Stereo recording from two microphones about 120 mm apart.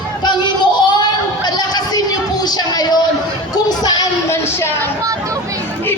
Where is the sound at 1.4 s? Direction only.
35° left (ahead or behind).